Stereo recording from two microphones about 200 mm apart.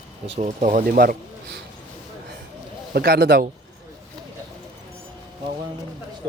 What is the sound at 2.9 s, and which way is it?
Speech, 50° right (ahead or behind).